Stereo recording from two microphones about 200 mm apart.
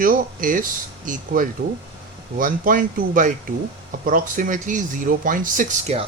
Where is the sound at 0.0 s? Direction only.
45° right (ahead or behind).